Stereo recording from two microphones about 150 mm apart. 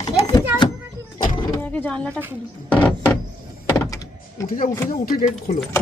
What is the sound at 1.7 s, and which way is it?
Speech, 10° left (ahead or behind).